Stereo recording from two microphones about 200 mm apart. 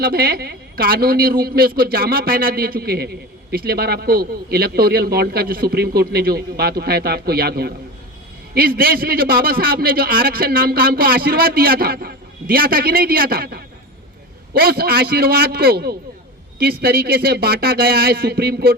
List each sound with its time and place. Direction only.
0.0 s a man's voice: 50° right (ahead or behind)